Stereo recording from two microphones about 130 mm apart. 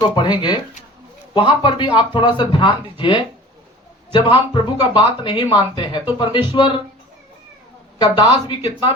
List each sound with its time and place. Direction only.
0.2 s speech: 35° left (ahead or behind)
7.9 s speech: 35° left (ahead or behind)